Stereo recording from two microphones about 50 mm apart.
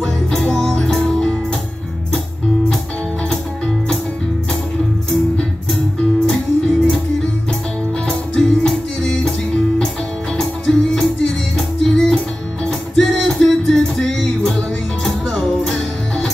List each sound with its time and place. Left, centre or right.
0.0 s music: centre
3.3 s music: centre
6.2 s music: centre
8.1 s music: centre
10.3 s music: centre
15.6 s music: centre